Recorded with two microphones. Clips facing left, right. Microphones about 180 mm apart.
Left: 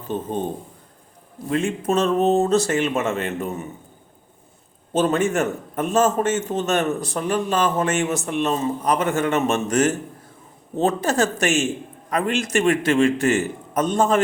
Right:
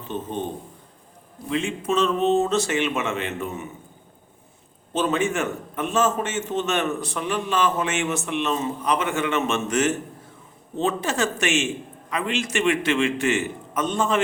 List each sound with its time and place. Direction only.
0.1 s a man's voice: 40° left (ahead or behind)
1.5 s a man's voice: 45° left (ahead or behind)
4.9 s a man's voice: 40° left (ahead or behind)